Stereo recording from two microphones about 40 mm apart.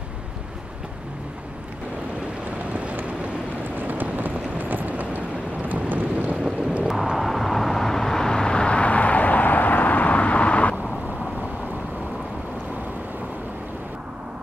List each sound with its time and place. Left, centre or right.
3.7 s vehicle: right
6.9 s vehicle: centre; by 10.8 s left